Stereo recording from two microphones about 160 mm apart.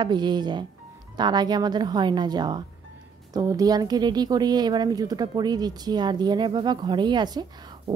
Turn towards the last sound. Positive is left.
turn(degrees=-25)  # may be behind; listen again after turning